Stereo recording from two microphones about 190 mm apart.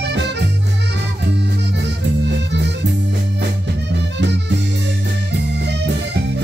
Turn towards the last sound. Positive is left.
turn(degrees=-65)  # may be behind; listen again after turning